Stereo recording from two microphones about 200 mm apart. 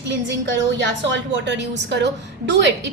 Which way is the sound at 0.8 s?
60° right (ahead or behind).